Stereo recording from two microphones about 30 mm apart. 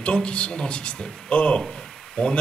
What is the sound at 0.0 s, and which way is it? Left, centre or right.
Speech, left.